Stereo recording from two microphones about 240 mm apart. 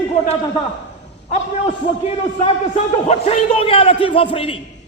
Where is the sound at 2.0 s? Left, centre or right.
Left.